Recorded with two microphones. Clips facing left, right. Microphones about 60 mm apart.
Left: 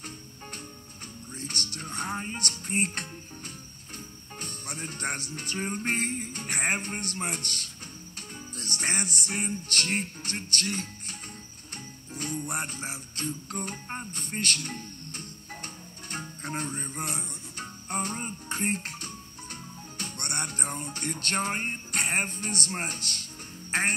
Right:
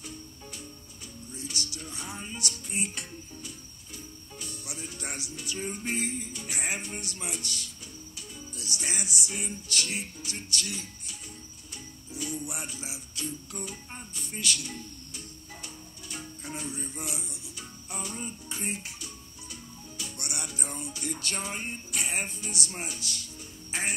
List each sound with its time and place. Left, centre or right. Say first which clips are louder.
0.0 s music: left 1 dB; left
23.7 s quack: left 6 dB; left